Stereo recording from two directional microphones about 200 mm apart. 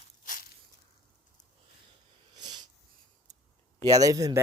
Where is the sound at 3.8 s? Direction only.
15° right (ahead or behind).